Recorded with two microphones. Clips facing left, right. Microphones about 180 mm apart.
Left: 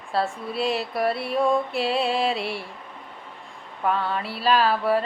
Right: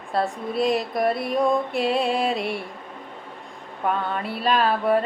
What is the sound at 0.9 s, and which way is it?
Mantra, 45° right (ahead or behind).